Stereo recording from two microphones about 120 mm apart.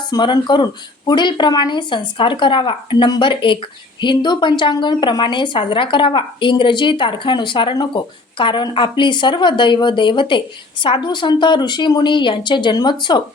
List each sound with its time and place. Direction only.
0.0 s speech: 40° left (ahead or behind)